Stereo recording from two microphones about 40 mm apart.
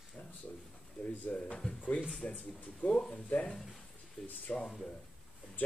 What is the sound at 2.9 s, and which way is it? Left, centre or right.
Speech, centre.